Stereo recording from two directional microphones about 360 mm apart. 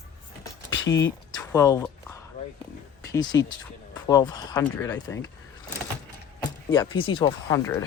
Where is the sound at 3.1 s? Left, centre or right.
Centre.